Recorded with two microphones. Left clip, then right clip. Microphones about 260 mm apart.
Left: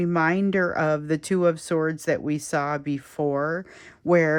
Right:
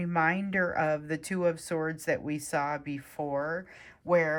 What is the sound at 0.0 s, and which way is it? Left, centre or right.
Speech, centre.